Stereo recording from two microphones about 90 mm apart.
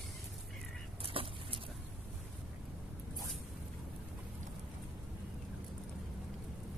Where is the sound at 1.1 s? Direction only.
90° right.